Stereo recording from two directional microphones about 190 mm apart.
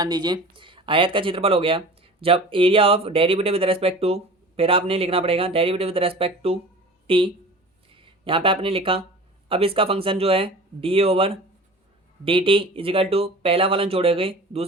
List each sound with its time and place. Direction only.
0.0 s speech: 20° right (ahead or behind)